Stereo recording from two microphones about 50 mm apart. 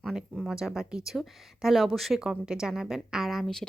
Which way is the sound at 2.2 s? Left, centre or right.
Centre.